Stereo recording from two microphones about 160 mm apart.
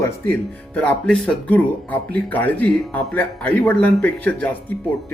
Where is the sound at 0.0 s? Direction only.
10° left (ahead or behind).